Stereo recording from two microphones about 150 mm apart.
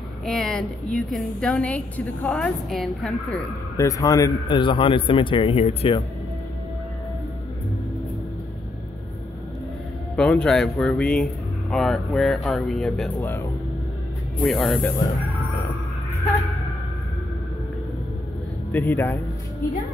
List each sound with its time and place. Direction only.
0.2 s a woman's voice: 5° left (ahead or behind)
3.7 s a man's voice: 20° left (ahead or behind); by 6.0 s 40° left (ahead or behind)
10.1 s a woman's voice: 5° left (ahead or behind)
14.4 s a woman's voice: centre (ahead or behind)
18.7 s speech: 10° left (ahead or behind)